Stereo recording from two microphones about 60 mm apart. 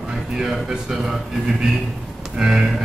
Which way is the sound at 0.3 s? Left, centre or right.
Centre.